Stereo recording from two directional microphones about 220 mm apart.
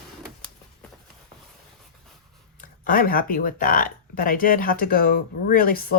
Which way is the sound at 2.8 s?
40° left (ahead or behind).